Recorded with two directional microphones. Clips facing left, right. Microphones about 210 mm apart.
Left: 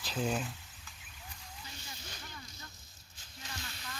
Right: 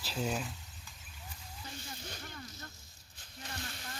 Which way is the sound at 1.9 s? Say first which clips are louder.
Right 3 dB; 50° right (ahead or behind).